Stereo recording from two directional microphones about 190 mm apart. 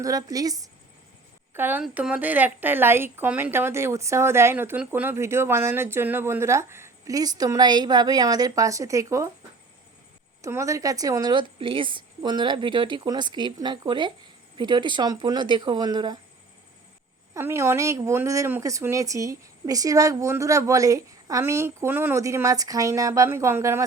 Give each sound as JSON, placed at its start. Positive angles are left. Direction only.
{"t": 0.0, "sound": "a woman's voice", "side_deg": -20}
{"t": 10.4, "sound": "a woman's voice", "side_deg": -15}
{"t": 17.3, "sound": "a woman's voice", "side_deg": -15}